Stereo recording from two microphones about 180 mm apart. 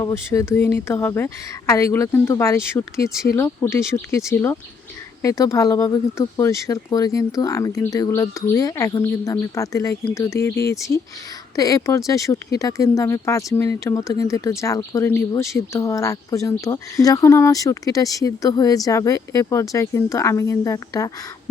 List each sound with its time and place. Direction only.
0.0 s speech: 15° left (ahead or behind)